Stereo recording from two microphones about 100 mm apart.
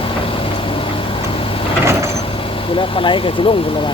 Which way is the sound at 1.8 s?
30° right (ahead or behind).